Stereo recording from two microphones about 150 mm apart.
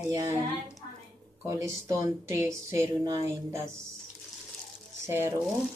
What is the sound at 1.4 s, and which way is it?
Speech, 20° right (ahead or behind).